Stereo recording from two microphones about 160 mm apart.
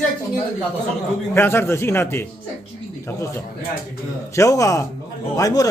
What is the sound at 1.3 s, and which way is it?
Speech, 15° left (ahead or behind).